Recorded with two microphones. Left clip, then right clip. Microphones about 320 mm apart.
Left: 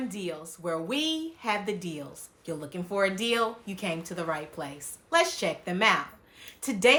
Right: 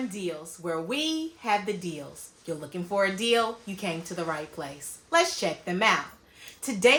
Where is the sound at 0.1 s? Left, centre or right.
Centre.